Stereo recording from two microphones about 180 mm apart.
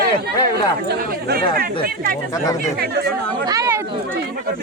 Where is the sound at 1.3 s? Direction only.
55° right (ahead or behind).